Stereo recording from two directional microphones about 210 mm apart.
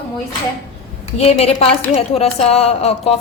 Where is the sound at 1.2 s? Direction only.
30° left (ahead or behind).